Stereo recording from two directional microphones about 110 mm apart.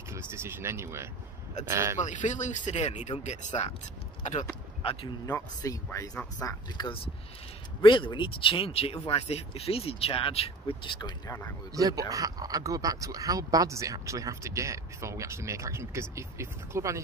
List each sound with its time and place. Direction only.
0.1 s speech: 25° right (ahead or behind)
2.0 s speech: 90° left
5.2 s speech: 30° left (ahead or behind)
6.8 s speech: 40° left (ahead or behind); by 10.8 s 60° left (ahead or behind)
11.0 s speech: 40° left (ahead or behind)
11.7 s speech: 35° right (ahead or behind)